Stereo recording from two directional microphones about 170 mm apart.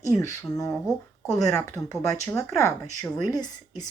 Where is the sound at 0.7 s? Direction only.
Centre (ahead or behind).